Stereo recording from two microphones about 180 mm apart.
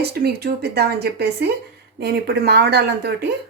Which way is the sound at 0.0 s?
60° right (ahead or behind).